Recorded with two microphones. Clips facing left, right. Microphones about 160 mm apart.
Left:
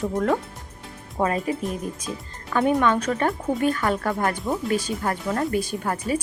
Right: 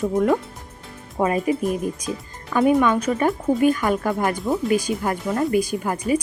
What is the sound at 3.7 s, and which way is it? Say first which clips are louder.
A woman's voice: right 2 dB; 15° right (ahead or behind).